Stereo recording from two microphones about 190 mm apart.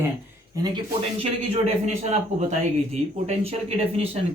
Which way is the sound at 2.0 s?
35° right (ahead or behind).